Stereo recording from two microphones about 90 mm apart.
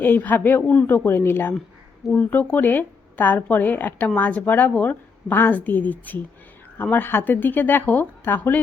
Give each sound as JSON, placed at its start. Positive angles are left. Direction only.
{"t": 0.0, "sound": "speech", "side_deg": 20}